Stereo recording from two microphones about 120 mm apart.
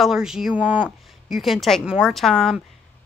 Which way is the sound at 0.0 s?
5° right (ahead or behind).